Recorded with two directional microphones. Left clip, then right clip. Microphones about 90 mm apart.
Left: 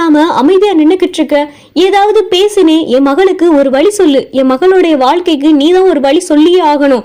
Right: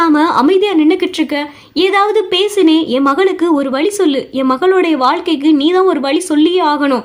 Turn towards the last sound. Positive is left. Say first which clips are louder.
# left 5 dB
turn(degrees=35)  # may be behind; listen again after turning